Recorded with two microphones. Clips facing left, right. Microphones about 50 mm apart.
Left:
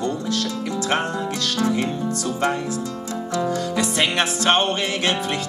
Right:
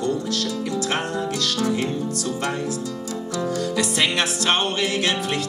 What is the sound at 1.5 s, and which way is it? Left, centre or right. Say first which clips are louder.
Music: left 3 dB; left.